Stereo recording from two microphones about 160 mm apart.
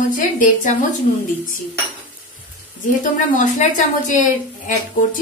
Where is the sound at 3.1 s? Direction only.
55° left (ahead or behind).